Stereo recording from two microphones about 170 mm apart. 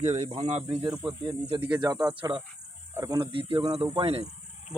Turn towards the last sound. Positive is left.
turn(degrees=-35)  # may be behind; listen again after turning